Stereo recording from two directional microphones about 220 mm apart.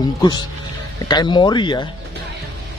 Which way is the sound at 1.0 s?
20° left (ahead or behind).